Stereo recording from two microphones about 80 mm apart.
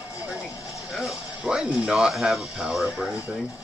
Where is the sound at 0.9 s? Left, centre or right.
Centre.